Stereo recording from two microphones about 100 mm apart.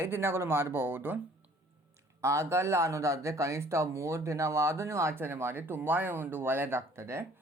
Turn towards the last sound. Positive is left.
turn(degrees=-25)  # may be behind; listen again after turning